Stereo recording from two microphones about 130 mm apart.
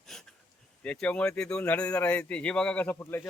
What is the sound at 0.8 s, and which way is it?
Speech, 10° left (ahead or behind).